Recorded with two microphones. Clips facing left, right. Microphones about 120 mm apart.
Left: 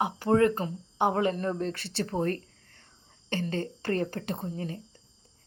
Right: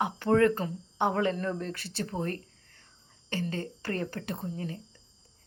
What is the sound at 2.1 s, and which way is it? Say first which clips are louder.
Speech: left 5 dB; 45° left (ahead or behind).